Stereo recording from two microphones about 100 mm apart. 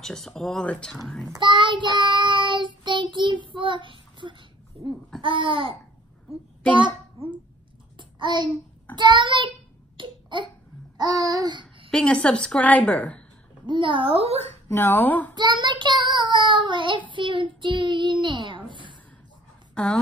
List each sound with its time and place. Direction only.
0.0 s speech: 5° left (ahead or behind)
1.4 s child singing: 55° right (ahead or behind)
4.7 s a child's voice: 60° right (ahead or behind)
8.0 s child singing: 50° right (ahead or behind)
8.9 s a child's voice: 55° right (ahead or behind)
9.9 s a sound: 55° right (ahead or behind)
11.0 s babbling: 40° right (ahead or behind)
11.9 s a woman's voice: 10° left (ahead or behind)
13.7 s speech: 55° right (ahead or behind); by 14.5 s 90° right
14.7 s a woman's voice: 25° left (ahead or behind)
15.3 s a child's voice: 50° right (ahead or behind)
19.7 s speech: 10° left (ahead or behind)